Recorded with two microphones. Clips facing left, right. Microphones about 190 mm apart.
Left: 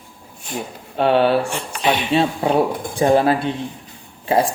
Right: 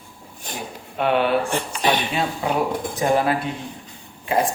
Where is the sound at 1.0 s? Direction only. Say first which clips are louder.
Left 4 dB; 30° left (ahead or behind).